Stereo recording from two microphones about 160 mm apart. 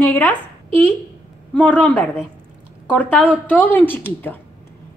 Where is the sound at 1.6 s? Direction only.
10° left (ahead or behind).